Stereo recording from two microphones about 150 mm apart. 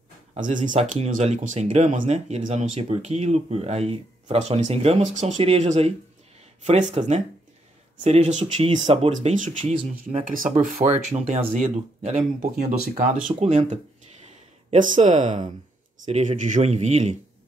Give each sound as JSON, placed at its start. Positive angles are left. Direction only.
{"t": 0.4, "sound": "speech", "side_deg": -60}
{"t": 8.0, "sound": "speech", "side_deg": -45}
{"t": 9.3, "sound": "speech", "side_deg": -60}
{"t": 13.4, "sound": "speech", "side_deg": -40}
{"t": 14.7, "sound": "speech", "side_deg": -55}